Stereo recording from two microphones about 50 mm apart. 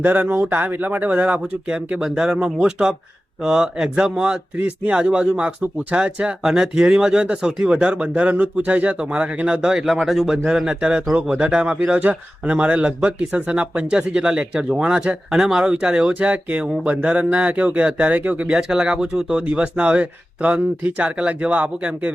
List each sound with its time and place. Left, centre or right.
0.0 s speech: right
1.6 s speech: right
4.6 s speech: right
9.8 s speech: centre
11.9 s speech: right
15.3 s speech: centre
16.1 s speech: right
18.4 s speech: centre
19.5 s speech: right